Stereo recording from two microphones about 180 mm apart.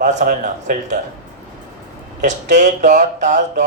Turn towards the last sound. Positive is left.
turn(degrees=-45)  # may be behind; listen again after turning